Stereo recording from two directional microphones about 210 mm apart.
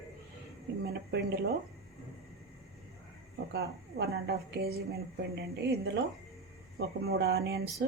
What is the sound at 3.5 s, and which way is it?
A woman's voice, 50° right (ahead or behind).